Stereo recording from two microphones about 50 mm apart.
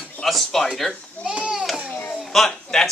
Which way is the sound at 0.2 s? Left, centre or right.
Centre.